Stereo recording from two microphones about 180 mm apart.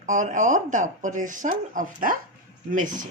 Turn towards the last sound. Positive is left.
turn(degrees=-45)  # may be behind; listen again after turning